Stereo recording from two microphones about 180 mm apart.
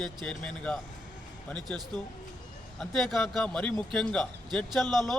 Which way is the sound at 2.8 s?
Centre (ahead or behind).